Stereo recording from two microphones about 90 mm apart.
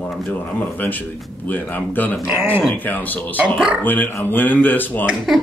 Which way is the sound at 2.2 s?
10° right (ahead or behind).